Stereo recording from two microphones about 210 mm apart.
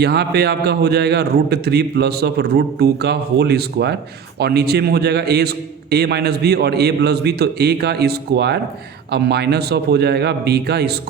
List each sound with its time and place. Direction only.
0.0 s a man's voice: 50° right (ahead or behind)